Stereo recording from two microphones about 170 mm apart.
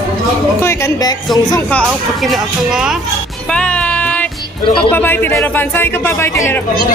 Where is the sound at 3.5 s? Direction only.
5° left (ahead or behind).